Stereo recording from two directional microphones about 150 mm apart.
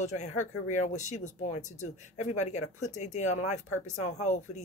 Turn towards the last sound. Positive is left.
turn(degrees=50)  # may be behind; listen again after turning